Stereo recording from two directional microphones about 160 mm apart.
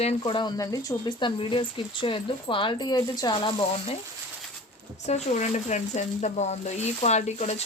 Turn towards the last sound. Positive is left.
turn(degrees=45)  # may be behind; listen again after turning